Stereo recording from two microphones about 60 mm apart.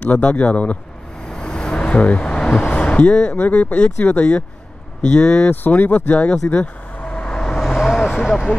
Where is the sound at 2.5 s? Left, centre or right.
Left.